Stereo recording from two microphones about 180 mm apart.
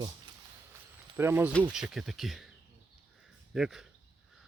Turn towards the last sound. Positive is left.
turn(degrees=0)  # may be behind; listen again after turning